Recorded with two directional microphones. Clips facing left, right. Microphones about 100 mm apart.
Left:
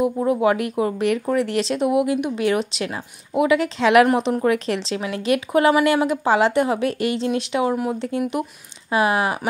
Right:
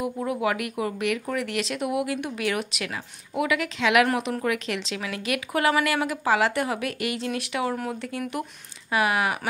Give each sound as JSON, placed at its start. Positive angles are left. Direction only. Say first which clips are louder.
{"t": 0.0, "sound": "speech", "louder": "left 8 dB", "side_deg": 30}